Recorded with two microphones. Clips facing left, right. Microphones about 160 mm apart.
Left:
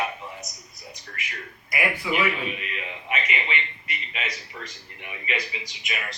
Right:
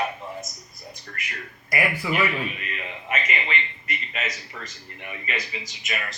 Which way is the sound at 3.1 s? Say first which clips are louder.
Right 1 dB; 45° right (ahead or behind).